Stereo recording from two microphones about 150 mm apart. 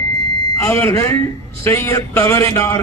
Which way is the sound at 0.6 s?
20° left (ahead or behind).